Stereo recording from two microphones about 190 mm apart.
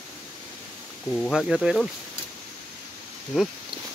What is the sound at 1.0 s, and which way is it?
Speech, 5° left (ahead or behind).